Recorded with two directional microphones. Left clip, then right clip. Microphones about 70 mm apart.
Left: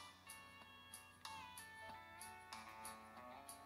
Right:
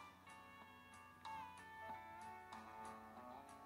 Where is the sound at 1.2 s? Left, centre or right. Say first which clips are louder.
Right 2 dB; right.